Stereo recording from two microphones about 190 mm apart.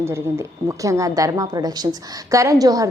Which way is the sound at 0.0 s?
15° right (ahead or behind).